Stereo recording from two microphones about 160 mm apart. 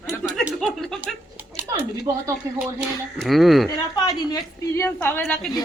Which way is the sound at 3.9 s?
25° left (ahead or behind).